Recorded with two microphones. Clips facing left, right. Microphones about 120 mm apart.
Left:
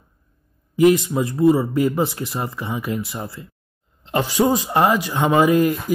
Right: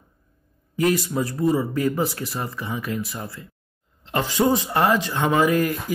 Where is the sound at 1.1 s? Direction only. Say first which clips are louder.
Left 5 dB; 25° left (ahead or behind).